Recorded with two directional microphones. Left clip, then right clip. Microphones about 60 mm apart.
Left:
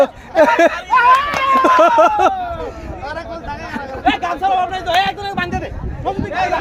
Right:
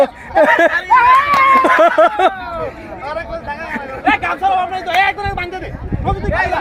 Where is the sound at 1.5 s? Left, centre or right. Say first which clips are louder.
Left 4 dB; centre.